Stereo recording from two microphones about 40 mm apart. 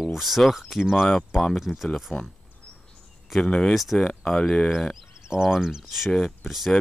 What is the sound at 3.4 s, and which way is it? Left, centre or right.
Speech, left.